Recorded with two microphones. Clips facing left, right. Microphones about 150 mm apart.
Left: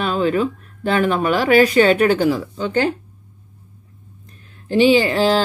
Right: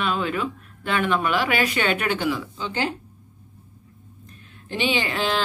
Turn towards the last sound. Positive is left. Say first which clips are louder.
# left 10 dB
turn(degrees=35)  # may be behind; listen again after turning